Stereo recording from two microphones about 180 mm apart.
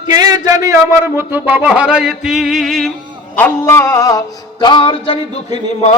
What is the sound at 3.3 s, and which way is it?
Music, 10° left (ahead or behind).